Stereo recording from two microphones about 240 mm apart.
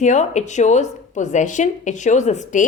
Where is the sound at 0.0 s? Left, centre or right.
Left.